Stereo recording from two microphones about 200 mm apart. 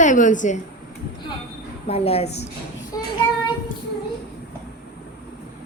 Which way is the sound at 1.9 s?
30° left (ahead or behind).